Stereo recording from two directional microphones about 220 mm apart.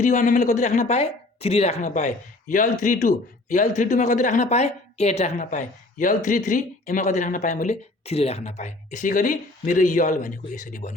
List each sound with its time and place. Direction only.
0.0 s speech: 35° left (ahead or behind)